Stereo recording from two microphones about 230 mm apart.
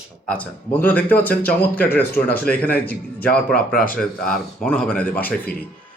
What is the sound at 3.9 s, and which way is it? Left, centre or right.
Speech, centre.